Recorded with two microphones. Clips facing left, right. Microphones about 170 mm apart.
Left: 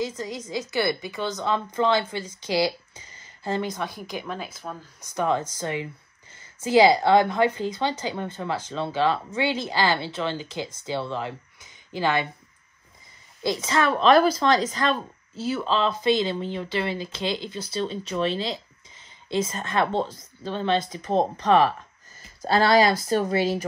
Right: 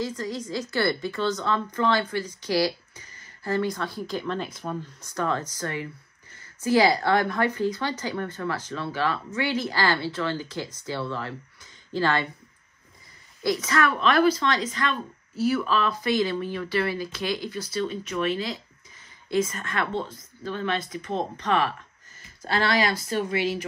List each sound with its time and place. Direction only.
0.0 s speech: 20° left (ahead or behind); by 4.7 s 5° left (ahead or behind)
5.1 s speech: 15° left (ahead or behind)
13.4 s speech: 25° left (ahead or behind)